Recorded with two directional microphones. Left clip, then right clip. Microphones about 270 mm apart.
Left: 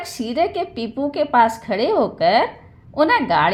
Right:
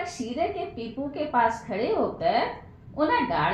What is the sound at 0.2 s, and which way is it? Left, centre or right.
A woman's voice, left.